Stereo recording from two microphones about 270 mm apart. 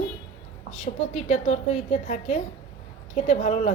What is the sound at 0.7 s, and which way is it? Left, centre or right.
A woman's voice, left.